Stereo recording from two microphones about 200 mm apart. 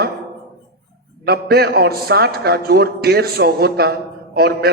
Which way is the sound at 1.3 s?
50° right (ahead or behind).